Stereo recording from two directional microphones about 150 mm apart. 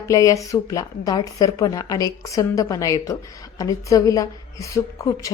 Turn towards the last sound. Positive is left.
turn(degrees=20)  # may be behind; listen again after turning